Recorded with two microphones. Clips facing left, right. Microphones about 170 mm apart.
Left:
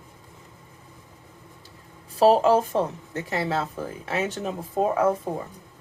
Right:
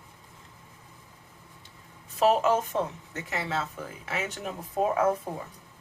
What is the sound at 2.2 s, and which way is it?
Speech, 30° left (ahead or behind).